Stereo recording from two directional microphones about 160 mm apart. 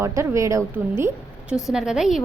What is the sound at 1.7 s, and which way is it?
Speech, 5° right (ahead or behind).